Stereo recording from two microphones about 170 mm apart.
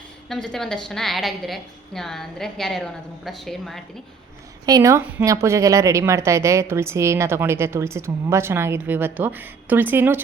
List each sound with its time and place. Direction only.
0.3 s a woman's voice: 5° left (ahead or behind)
4.6 s a woman's voice: 20° right (ahead or behind)